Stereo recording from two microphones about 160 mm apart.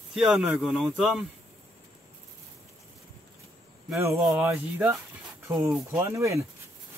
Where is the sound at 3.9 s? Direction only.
20° right (ahead or behind).